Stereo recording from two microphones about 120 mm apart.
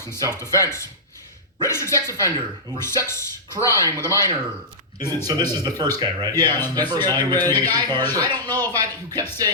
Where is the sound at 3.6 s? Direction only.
25° left (ahead or behind).